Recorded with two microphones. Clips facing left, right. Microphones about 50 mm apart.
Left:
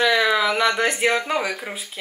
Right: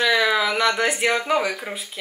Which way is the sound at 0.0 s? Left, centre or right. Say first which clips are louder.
Left 1 dB; centre.